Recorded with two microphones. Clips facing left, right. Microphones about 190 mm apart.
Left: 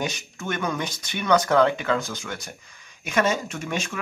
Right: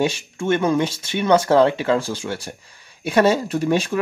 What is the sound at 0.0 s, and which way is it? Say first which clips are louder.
Speech: right 8 dB; 30° right (ahead or behind).